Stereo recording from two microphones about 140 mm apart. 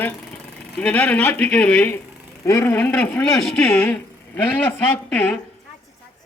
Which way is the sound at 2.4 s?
20° left (ahead or behind).